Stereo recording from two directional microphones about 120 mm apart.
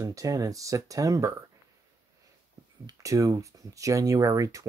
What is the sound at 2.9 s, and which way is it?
Speech, 25° right (ahead or behind).